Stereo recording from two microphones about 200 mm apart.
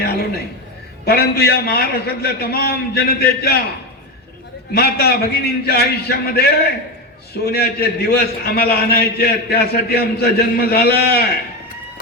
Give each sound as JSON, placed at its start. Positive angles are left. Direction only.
{"t": 0.0, "sound": "a sound", "side_deg": 50}
{"t": 1.0, "sound": "a man's voice", "side_deg": 50}
{"t": 4.7, "sound": "a man's voice", "side_deg": 50}